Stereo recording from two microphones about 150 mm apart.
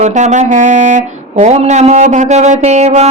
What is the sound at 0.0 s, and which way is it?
Mantra, 50° right (ahead or behind).